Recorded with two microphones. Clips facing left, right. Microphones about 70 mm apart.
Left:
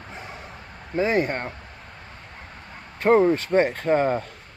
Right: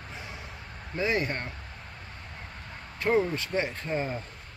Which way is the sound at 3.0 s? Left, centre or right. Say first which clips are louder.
Left 8 dB; left.